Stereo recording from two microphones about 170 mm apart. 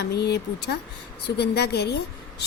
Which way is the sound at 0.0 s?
75° left (ahead or behind).